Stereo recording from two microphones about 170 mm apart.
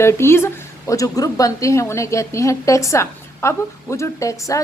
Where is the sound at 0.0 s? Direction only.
15° left (ahead or behind).